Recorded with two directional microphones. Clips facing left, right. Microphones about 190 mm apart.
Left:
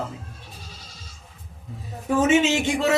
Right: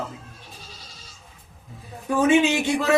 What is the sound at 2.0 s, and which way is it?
Speech, 25° left (ahead or behind).